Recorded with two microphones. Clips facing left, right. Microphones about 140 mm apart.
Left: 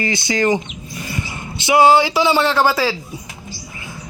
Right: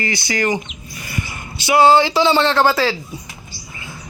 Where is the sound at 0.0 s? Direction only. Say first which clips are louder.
Left 2 dB; 20° left (ahead or behind).